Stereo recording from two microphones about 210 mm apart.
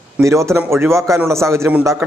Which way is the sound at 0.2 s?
15° right (ahead or behind).